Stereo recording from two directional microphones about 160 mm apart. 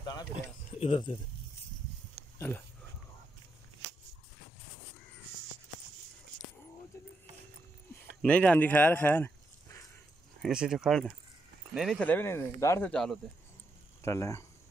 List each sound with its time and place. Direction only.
0.7 s speech: 35° left (ahead or behind)
2.3 s speech: 15° left (ahead or behind)
8.2 s speech: 10° left (ahead or behind)
10.4 s speech: 5° right (ahead or behind)
12.0 s speech: 10° left (ahead or behind)
12.9 s speech: centre (ahead or behind)
14.0 s speech: 20° left (ahead or behind)